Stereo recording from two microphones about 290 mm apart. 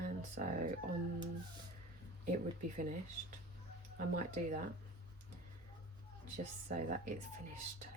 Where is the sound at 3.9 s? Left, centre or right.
Right.